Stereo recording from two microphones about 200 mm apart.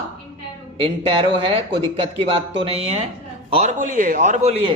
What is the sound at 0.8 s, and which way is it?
A man's voice, 25° right (ahead or behind).